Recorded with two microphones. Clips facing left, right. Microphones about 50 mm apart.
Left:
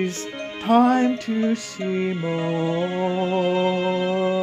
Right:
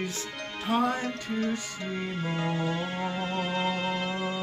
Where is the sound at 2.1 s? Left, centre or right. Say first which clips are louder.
Left 7 dB; left.